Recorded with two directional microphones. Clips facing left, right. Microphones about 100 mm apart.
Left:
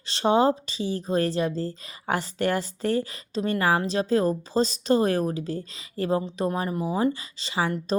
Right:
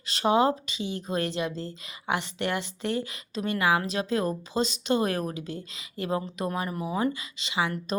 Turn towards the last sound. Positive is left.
turn(degrees=35)  # may be behind; listen again after turning